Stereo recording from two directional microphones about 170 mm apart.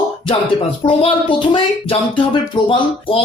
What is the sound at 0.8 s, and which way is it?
A man's voice, 30° left (ahead or behind).